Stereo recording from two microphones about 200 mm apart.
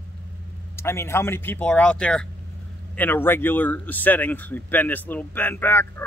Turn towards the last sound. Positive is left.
turn(degrees=10)  # may be behind; listen again after turning